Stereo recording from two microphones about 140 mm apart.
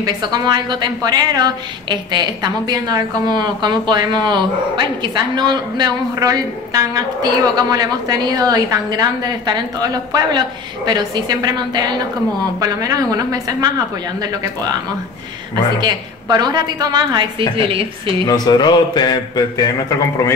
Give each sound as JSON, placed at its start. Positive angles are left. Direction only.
{"t": 0.0, "sound": "a woman's voice", "side_deg": -30}
{"t": 15.8, "sound": "a woman's voice", "side_deg": -30}
{"t": 18.2, "sound": "a sound", "side_deg": 30}